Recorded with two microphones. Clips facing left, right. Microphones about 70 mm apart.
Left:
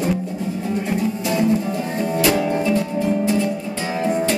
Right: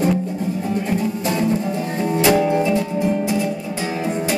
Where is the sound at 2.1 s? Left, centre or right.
Centre.